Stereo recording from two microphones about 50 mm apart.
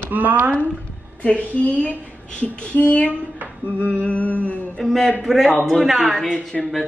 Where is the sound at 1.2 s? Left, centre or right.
Left.